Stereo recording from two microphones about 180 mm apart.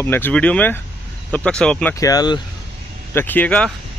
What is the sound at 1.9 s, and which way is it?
Speech, 20° left (ahead or behind).